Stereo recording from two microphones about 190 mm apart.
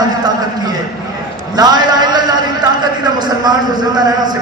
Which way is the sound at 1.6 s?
20° right (ahead or behind).